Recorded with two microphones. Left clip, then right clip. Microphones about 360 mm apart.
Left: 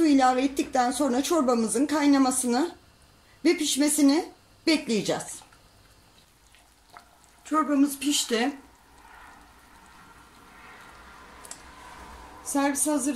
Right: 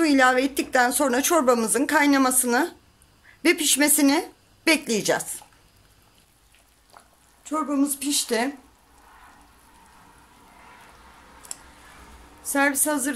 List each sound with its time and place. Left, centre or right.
0.0 s speech: right
7.4 s speech: centre
12.4 s speech: right